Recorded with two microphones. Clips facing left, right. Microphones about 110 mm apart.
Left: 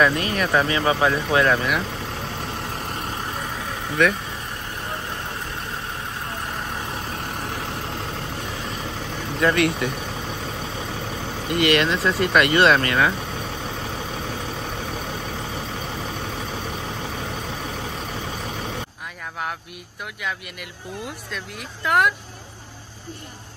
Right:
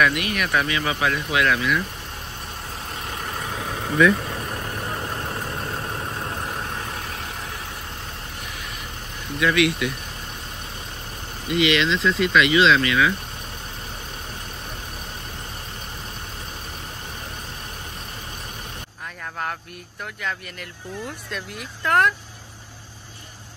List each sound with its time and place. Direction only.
0.0 s speech: 30° left (ahead or behind)
4.0 s speech: 70° left (ahead or behind)
9.4 s speech: 40° left (ahead or behind)
11.4 s speech: 55° left (ahead or behind)
21.3 s speech: centre (ahead or behind)